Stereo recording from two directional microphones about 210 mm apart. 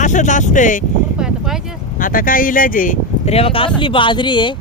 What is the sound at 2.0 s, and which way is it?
Speech, 40° left (ahead or behind).